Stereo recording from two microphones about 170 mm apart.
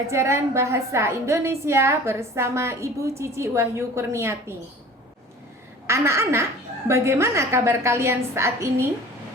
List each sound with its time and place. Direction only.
0.1 s a woman's voice: 15° right (ahead or behind)
5.9 s a woman's voice: 15° right (ahead or behind)